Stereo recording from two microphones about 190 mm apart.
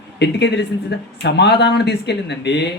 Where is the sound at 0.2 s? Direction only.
65° left (ahead or behind).